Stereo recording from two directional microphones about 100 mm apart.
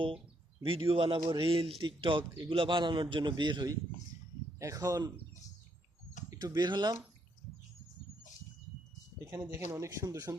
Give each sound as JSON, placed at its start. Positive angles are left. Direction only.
{"t": 0.6, "sound": "speech", "side_deg": -65}
{"t": 4.6, "sound": "speech", "side_deg": -35}
{"t": 6.3, "sound": "speech", "side_deg": -40}
{"t": 9.2, "sound": "speech", "side_deg": -25}